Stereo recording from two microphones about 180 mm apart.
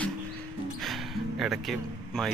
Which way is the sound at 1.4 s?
Centre (ahead or behind).